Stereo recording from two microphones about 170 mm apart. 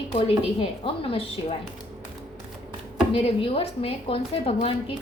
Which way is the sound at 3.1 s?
35° left (ahead or behind).